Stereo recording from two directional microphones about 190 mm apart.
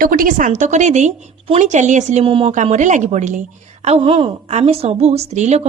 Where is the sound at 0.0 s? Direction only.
45° right (ahead or behind).